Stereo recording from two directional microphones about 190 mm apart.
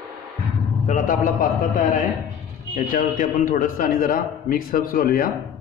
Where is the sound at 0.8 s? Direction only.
45° left (ahead or behind).